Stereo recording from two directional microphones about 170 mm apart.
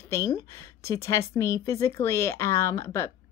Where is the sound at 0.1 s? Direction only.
15° left (ahead or behind).